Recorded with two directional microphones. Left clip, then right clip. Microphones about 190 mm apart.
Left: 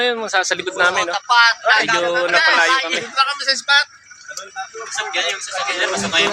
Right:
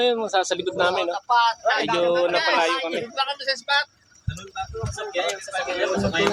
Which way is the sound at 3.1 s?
20° right (ahead or behind).